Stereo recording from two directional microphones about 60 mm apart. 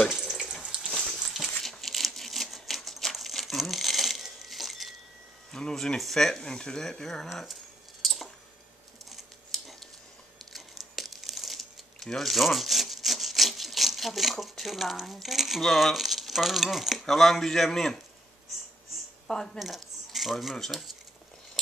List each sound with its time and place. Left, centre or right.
0.1 s water tap: centre
0.7 s crumpling: centre
5.5 s speech: centre
8.0 s squish: centre
9.1 s a sound: centre
10.5 s crumpling: centre
17.0 s speech: centre
19.2 s speech: centre
19.6 s a sound: centre
20.5 s speech: centre